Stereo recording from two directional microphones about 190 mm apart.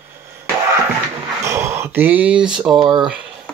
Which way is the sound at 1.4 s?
15° right (ahead or behind).